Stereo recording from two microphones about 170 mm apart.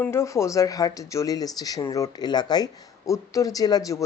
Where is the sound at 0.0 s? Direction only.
15° left (ahead or behind).